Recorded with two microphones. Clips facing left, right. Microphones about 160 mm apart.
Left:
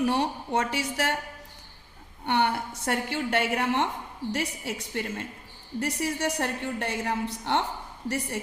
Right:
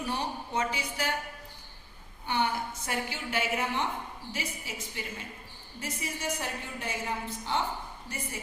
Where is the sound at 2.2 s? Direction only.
70° left (ahead or behind).